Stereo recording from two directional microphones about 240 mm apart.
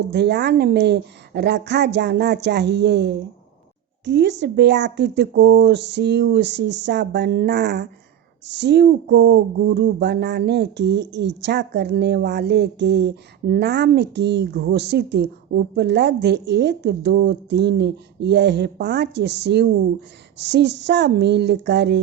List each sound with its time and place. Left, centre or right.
0.1 s speech: right